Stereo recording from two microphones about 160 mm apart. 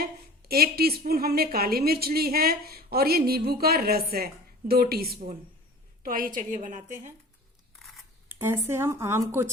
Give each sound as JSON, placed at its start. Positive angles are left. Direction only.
{"t": 0.0, "sound": "a woman's voice", "side_deg": -70}
{"t": 8.3, "sound": "speech", "side_deg": -15}